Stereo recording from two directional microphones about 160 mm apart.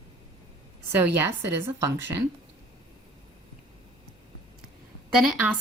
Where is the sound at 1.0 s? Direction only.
15° right (ahead or behind).